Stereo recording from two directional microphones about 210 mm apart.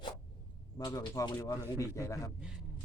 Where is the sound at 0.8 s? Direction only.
20° left (ahead or behind).